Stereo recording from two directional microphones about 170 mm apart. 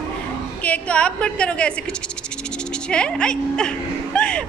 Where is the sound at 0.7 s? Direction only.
5° left (ahead or behind).